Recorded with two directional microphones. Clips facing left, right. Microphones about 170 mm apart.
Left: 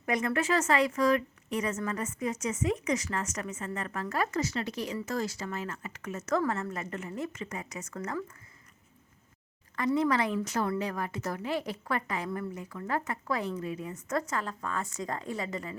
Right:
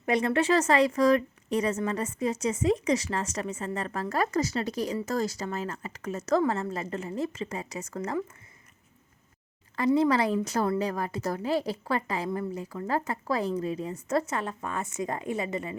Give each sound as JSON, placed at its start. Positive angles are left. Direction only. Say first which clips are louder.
{"t": 0.0, "sound": "a woman's voice", "louder": "right 4 dB", "side_deg": -30}
{"t": 9.7, "sound": "a woman's voice", "louder": "right 4 dB", "side_deg": -30}